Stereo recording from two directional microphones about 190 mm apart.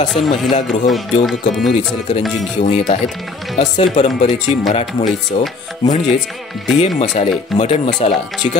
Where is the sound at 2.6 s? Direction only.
35° left (ahead or behind).